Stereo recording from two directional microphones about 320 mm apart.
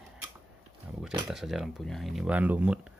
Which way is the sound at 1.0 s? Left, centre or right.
Centre.